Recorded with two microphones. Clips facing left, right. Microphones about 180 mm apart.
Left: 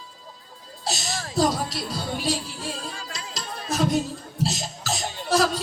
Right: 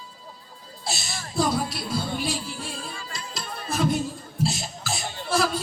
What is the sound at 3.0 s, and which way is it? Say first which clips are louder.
Music: left 1 dB; 90° left.